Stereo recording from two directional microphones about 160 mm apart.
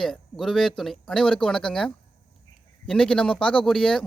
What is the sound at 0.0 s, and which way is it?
Speech, centre (ahead or behind).